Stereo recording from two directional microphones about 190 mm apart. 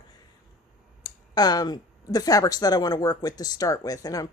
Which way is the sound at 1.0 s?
20° left (ahead or behind).